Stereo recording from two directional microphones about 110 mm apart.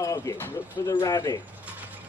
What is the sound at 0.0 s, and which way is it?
Speech, 30° left (ahead or behind).